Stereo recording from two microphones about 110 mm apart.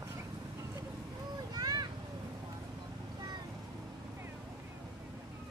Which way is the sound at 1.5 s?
35° right (ahead or behind).